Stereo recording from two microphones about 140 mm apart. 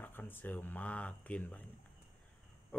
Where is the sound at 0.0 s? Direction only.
15° left (ahead or behind).